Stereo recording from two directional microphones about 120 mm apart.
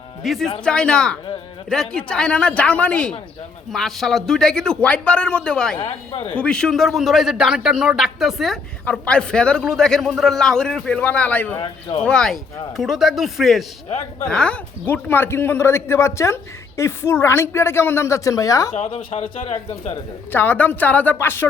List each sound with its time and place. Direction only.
0.2 s a man's voice: centre (ahead or behind)
5.9 s speech: 55° left (ahead or behind)
6.3 s a man's voice: 10° left (ahead or behind)
8.8 s a man's voice: 10° left (ahead or behind)
11.6 s speech: 40° left (ahead or behind)
12.0 s a man's voice: 5° left (ahead or behind); by 18.7 s 30° left (ahead or behind)
18.7 s speech: 65° left (ahead or behind)
20.3 s a man's voice: 15° left (ahead or behind)